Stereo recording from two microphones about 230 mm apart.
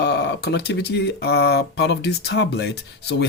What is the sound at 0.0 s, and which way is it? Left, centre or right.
Speech, left.